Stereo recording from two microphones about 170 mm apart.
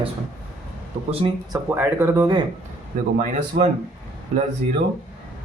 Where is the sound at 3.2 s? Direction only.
50° right (ahead or behind).